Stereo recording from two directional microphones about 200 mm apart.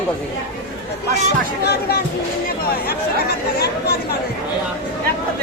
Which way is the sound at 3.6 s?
50° left (ahead or behind).